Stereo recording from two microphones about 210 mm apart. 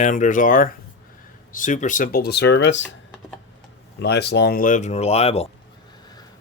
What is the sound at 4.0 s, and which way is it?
Speech, 55° left (ahead or behind).